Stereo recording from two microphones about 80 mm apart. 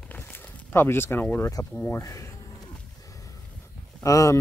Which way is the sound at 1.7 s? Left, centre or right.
Left.